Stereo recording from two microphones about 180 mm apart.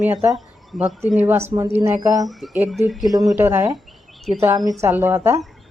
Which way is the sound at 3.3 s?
10° right (ahead or behind).